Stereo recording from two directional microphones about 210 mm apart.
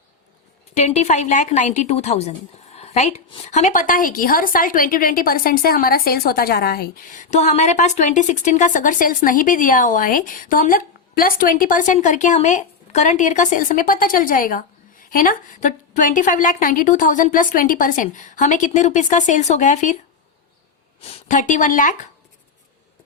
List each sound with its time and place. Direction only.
0.7 s a woman's voice: 30° left (ahead or behind)
21.0 s a woman's voice: 35° left (ahead or behind)